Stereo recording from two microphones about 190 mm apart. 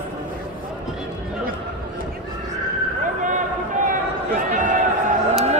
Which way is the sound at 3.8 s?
45° right (ahead or behind).